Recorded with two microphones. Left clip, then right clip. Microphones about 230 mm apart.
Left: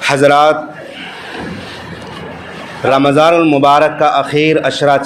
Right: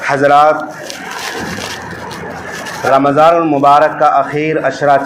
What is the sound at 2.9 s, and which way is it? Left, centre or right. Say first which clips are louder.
A man's voice: right 1 dB; left.